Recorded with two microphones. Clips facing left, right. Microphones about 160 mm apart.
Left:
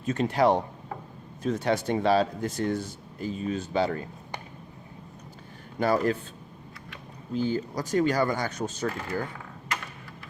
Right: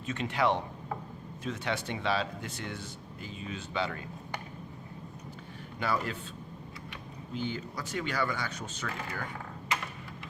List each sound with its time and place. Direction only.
0.0 s speech: 40° left (ahead or behind)
5.8 s speech: 45° left (ahead or behind)
7.3 s speech: 40° left (ahead or behind)